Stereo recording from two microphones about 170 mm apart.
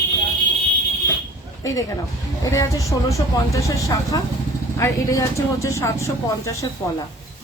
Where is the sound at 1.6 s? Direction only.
20° left (ahead or behind).